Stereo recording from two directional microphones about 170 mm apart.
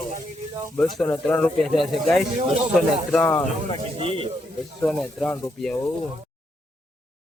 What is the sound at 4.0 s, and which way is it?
Speech, 30° right (ahead or behind).